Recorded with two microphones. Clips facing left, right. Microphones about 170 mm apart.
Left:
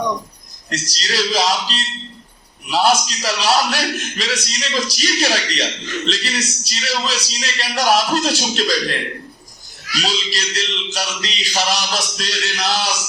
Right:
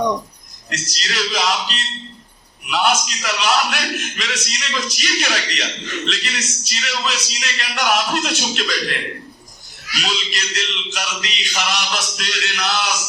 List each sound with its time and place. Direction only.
0.7 s a man's voice: 35° left (ahead or behind)
10.0 s a man's voice: 35° left (ahead or behind)